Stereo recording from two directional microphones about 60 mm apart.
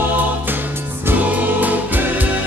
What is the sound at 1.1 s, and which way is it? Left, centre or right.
Music, right.